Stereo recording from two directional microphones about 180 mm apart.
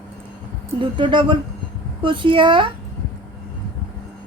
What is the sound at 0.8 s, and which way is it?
A woman's voice, 25° right (ahead or behind).